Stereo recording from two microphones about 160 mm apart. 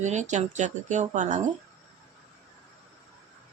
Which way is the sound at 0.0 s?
45° right (ahead or behind).